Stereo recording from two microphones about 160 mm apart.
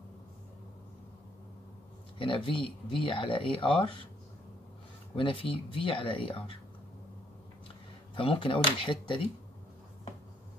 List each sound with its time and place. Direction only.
2.1 s speech: 30° left (ahead or behind)
5.1 s speech: 35° left (ahead or behind)
7.6 s speech: 35° left (ahead or behind)